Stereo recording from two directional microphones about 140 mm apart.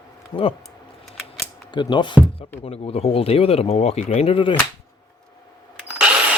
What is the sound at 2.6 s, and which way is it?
Speech, 45° left (ahead or behind).